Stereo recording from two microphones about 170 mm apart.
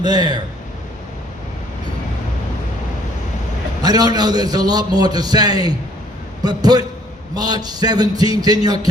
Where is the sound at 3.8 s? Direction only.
25° right (ahead or behind).